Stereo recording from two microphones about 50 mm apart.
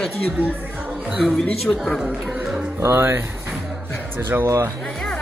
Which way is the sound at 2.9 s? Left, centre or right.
Right.